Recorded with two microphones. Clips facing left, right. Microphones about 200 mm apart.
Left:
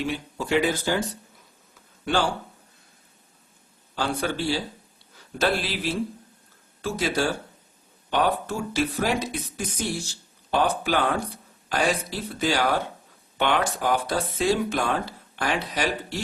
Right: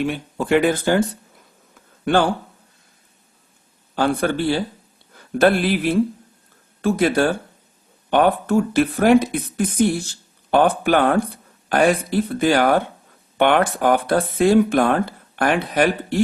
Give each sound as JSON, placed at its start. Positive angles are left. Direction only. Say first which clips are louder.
{"t": 0.0, "sound": "speech", "louder": "right 6 dB", "side_deg": -55}
{"t": 2.0, "sound": "speech", "louder": "right 7 dB", "side_deg": -55}
{"t": 3.9, "sound": "speech", "louder": "right 7 dB", "side_deg": -55}